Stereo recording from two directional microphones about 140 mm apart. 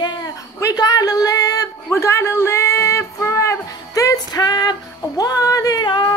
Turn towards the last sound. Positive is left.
turn(degrees=30)  # may be behind; listen again after turning